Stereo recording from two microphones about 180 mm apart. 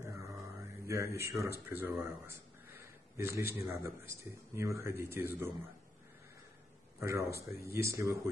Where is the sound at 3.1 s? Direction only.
15° right (ahead or behind).